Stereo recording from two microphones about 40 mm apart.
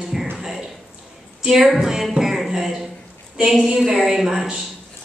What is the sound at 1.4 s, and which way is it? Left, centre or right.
A man's voice, centre.